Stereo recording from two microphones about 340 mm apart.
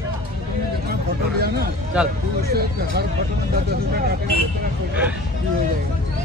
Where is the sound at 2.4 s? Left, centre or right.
Right.